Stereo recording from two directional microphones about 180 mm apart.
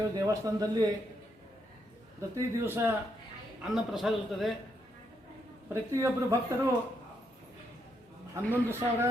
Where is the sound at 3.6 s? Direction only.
Centre (ahead or behind).